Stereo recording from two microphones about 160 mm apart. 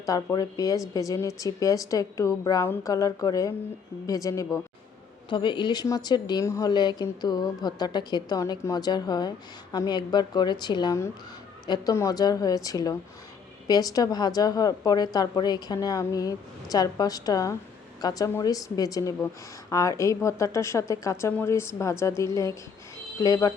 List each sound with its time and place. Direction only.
0.0 s a woman's voice: 20° left (ahead or behind)
5.3 s a woman's voice: 30° left (ahead or behind)